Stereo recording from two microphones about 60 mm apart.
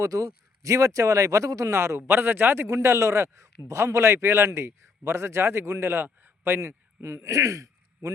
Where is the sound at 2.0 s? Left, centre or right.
Right.